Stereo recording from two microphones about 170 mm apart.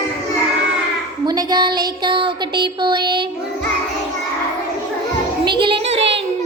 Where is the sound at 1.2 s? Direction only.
25° right (ahead or behind).